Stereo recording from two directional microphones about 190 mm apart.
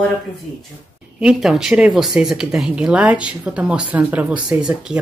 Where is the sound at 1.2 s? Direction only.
5° right (ahead or behind).